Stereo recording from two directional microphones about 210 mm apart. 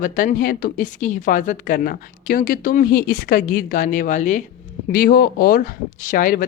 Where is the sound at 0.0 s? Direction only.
40° left (ahead or behind).